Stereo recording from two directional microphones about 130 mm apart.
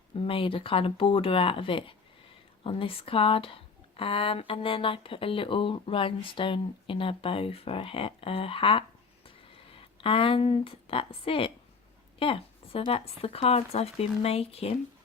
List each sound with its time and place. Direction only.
0.2 s speech: 45° left (ahead or behind)